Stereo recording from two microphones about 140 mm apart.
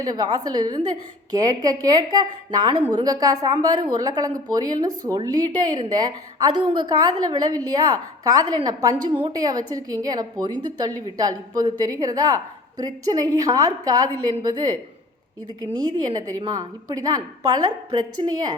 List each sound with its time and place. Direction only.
0.0 s a woman's voice: 30° right (ahead or behind)
16.0 s a woman's voice: 30° right (ahead or behind)